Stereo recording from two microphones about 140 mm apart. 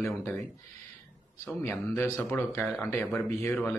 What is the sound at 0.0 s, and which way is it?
Speech, 20° left (ahead or behind).